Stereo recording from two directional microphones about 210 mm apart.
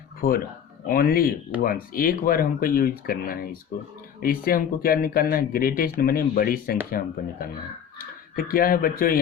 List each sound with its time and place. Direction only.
0.2 s speech: 45° left (ahead or behind)